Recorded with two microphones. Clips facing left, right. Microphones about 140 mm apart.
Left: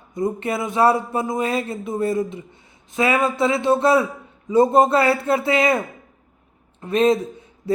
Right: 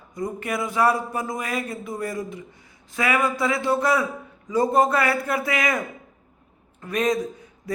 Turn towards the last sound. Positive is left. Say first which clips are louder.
# left 6 dB
turn(degrees=25)  # may be behind; listen again after turning